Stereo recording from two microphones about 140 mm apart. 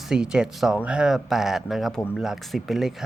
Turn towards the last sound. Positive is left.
turn(degrees=0)  # may be behind; listen again after turning